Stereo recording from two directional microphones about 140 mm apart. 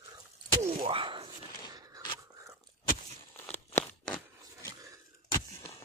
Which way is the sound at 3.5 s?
10° left (ahead or behind).